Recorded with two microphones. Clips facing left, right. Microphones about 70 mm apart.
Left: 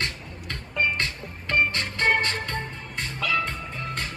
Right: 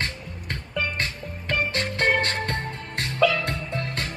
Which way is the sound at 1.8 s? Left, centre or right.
Right.